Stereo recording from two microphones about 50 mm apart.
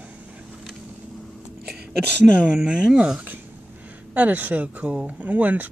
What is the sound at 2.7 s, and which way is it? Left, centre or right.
Speech, centre.